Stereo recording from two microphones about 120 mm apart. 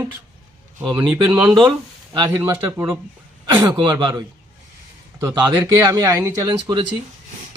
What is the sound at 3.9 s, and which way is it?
Speech, 35° right (ahead or behind).